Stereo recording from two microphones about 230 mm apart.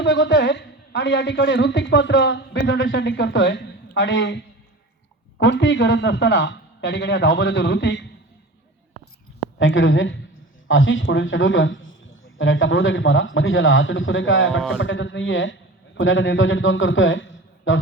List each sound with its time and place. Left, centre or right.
0.0 s a woman's voice: left
5.4 s a woman's voice: left
9.6 s a man's voice: left